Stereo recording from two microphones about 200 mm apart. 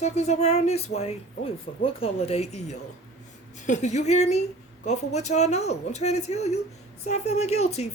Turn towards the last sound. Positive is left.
turn(degrees=30)  # may be behind; listen again after turning